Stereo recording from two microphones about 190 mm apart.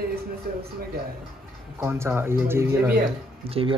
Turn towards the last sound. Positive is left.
turn(degrees=-30)  # may be behind; listen again after turning